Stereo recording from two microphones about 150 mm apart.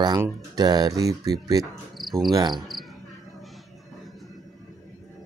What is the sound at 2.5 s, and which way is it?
Speech, centre (ahead or behind).